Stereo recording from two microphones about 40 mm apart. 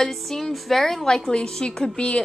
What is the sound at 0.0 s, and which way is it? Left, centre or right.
A woman's voice, centre.